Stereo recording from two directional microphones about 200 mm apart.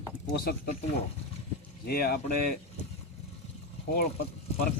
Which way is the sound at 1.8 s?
50° left (ahead or behind).